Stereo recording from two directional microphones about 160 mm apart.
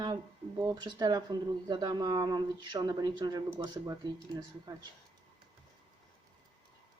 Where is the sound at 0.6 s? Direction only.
25° right (ahead or behind).